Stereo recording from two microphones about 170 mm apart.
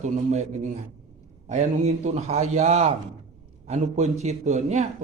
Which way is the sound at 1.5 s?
45° right (ahead or behind).